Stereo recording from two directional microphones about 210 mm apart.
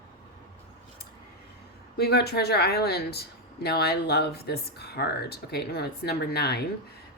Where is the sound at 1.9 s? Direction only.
50° left (ahead or behind).